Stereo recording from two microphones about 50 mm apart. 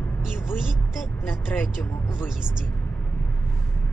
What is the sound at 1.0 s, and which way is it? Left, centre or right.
Speech, left.